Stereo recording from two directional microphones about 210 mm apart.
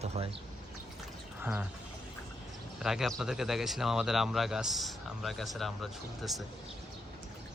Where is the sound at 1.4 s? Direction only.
5° right (ahead or behind).